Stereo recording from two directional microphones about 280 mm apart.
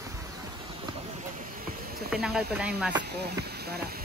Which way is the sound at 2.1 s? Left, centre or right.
Centre.